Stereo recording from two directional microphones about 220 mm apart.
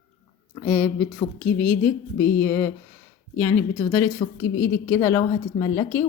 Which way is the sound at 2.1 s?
10° left (ahead or behind).